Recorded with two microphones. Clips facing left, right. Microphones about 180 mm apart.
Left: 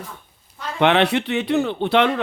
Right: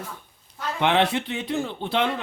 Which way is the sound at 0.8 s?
70° left (ahead or behind).